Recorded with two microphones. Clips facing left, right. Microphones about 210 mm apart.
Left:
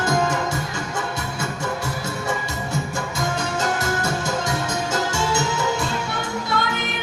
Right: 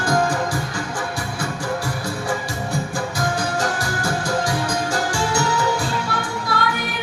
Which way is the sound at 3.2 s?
25° left (ahead or behind).